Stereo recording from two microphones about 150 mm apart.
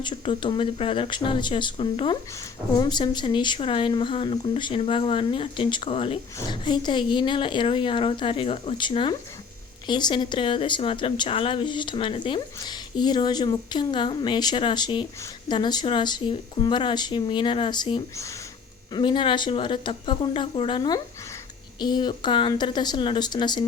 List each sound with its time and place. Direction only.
0.0 s speech: 35° left (ahead or behind)